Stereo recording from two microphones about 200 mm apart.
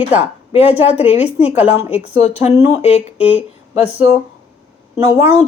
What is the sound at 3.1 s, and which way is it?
Speech, 5° right (ahead or behind).